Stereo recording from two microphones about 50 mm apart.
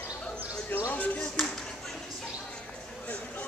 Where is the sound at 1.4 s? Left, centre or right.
Centre.